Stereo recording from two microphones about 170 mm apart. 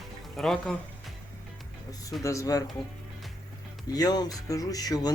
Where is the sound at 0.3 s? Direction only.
Centre (ahead or behind).